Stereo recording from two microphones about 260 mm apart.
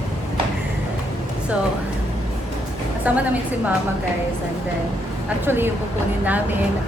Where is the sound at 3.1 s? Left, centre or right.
Centre.